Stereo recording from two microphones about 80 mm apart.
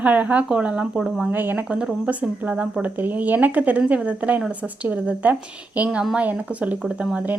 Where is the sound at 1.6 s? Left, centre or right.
Centre.